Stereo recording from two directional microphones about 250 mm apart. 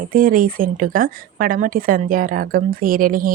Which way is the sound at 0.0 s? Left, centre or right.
Right.